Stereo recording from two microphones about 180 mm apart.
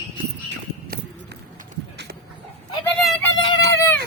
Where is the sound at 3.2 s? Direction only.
25° left (ahead or behind).